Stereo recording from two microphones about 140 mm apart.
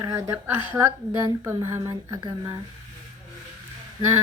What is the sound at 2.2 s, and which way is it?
Speech, 30° right (ahead or behind).